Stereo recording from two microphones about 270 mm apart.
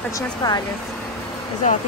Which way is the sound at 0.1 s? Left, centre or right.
Centre.